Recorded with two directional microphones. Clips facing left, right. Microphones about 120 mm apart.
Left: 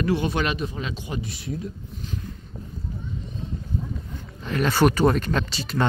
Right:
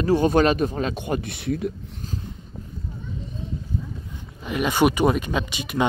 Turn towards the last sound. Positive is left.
turn(degrees=-15)  # may be behind; listen again after turning